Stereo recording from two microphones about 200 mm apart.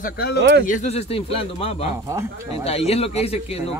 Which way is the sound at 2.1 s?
15° right (ahead or behind).